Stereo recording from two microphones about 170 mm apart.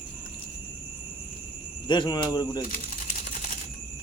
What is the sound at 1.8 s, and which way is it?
Speech, 25° left (ahead or behind).